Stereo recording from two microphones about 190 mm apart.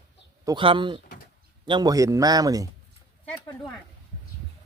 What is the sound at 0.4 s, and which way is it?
Speech, 25° right (ahead or behind).